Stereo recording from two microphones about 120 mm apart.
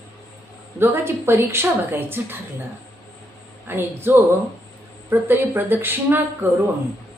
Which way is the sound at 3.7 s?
20° right (ahead or behind).